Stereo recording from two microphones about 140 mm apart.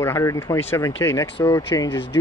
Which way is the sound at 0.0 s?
20° left (ahead or behind).